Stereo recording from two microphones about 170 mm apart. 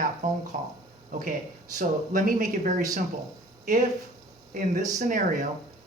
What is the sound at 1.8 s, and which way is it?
Speech, 50° right (ahead or behind).